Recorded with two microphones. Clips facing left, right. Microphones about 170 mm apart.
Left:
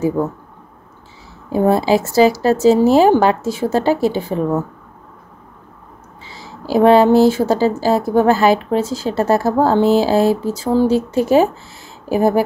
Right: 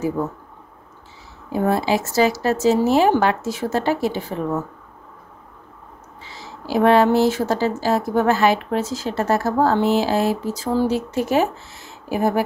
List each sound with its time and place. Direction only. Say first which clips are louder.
1.7 s a woman's voice: left 5 dB; 30° left (ahead or behind)
6.3 s a woman's voice: left 5 dB; 35° left (ahead or behind)